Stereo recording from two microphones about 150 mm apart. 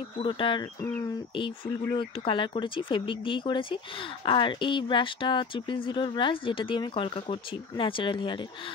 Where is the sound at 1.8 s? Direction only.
30° left (ahead or behind).